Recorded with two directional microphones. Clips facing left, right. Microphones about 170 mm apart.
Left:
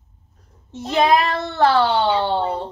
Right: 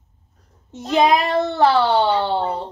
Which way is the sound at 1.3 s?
15° right (ahead or behind).